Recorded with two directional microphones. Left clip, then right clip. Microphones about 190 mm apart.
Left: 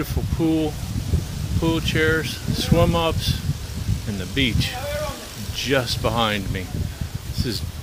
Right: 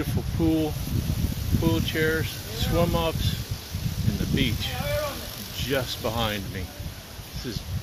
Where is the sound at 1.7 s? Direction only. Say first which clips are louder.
Left 5 dB; 25° left (ahead or behind).